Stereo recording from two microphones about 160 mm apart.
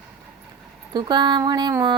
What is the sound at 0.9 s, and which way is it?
Music, 25° right (ahead or behind).